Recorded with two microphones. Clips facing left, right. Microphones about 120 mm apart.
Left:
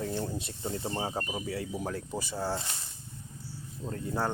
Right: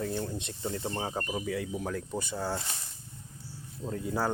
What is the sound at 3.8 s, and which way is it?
Speech, 5° right (ahead or behind).